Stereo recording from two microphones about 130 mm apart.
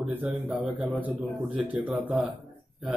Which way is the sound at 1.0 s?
10° right (ahead or behind).